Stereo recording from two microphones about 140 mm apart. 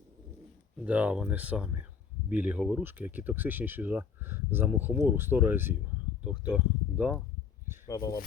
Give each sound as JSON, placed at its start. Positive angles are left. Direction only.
{"t": 0.9, "sound": "speech", "side_deg": -10}
{"t": 7.9, "sound": "speech", "side_deg": 25}